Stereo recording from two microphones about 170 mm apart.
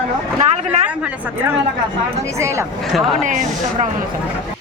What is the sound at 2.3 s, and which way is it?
Speech, 15° right (ahead or behind).